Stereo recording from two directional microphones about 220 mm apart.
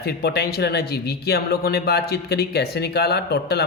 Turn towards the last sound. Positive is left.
turn(degrees=45)  # may be behind; listen again after turning